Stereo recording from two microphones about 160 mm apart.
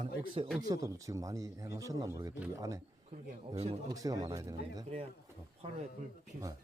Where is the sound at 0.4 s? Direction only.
35° right (ahead or behind).